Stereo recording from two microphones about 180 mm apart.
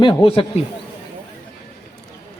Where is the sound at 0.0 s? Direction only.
30° left (ahead or behind).